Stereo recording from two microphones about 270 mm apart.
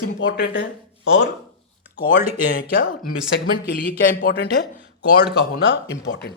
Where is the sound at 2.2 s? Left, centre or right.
Left.